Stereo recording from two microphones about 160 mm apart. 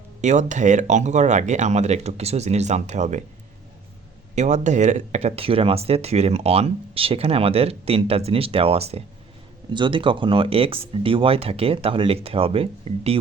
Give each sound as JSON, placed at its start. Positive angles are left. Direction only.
{"t": 0.2, "sound": "speech", "side_deg": -50}
{"t": 4.4, "sound": "speech", "side_deg": -45}